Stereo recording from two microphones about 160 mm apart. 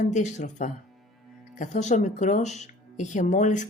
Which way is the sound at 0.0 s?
50° left (ahead or behind).